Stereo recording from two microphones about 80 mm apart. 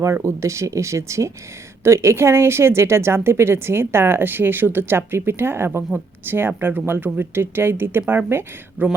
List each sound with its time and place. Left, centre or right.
0.0 s speech: right